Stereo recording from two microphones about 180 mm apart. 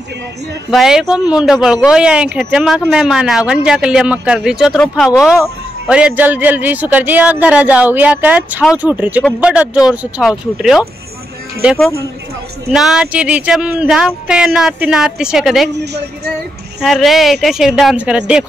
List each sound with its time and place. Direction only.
0.7 s a man's voice: centre (ahead or behind)
15.7 s speech: 70° right (ahead or behind)
16.8 s speech: centre (ahead or behind)